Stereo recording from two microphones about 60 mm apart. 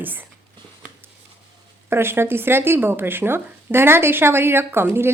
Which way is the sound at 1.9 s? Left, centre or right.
Right.